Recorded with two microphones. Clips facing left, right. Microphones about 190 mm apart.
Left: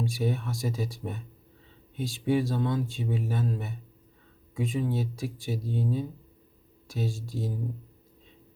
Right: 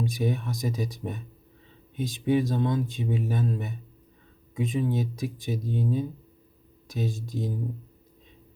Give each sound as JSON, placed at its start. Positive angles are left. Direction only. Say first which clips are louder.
{"t": 0.0, "sound": "speech", "louder": "right 1 dB", "side_deg": -15}